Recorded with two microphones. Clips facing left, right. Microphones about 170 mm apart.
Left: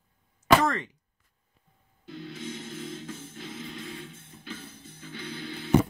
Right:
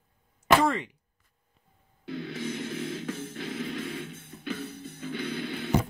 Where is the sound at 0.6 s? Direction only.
10° right (ahead or behind).